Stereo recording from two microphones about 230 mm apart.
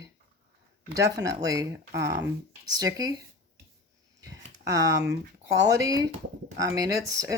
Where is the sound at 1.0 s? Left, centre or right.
Centre.